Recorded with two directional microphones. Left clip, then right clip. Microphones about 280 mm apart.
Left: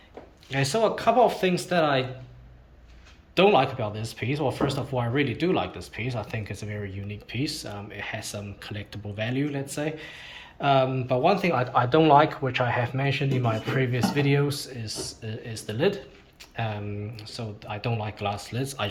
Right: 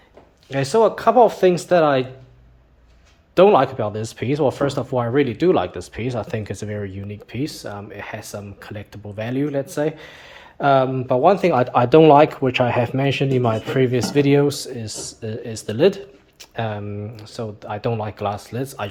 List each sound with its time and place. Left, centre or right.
0.5 s speech: right
3.3 s speech: centre